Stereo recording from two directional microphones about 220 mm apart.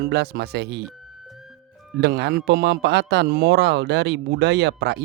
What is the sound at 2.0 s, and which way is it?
Speech, 50° right (ahead or behind).